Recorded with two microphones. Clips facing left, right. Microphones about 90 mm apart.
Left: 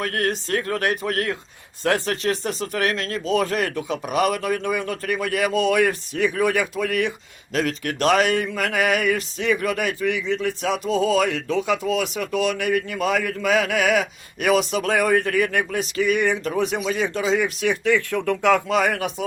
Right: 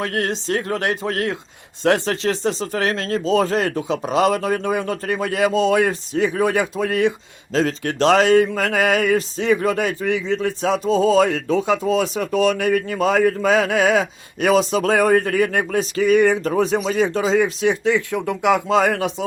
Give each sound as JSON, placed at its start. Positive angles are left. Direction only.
{"t": 0.0, "sound": "speech", "side_deg": -25}
{"t": 18.7, "sound": "speech", "side_deg": -30}